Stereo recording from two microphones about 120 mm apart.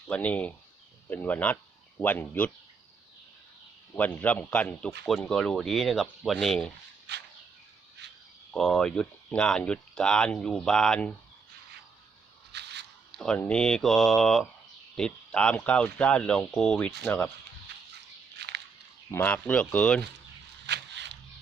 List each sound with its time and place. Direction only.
0.1 s speech: 10° left (ahead or behind)
3.9 s speech: 15° left (ahead or behind)
8.5 s speech: 5° left (ahead or behind)
13.1 s speech: 5° left (ahead or behind)
19.1 s speech: 10° left (ahead or behind)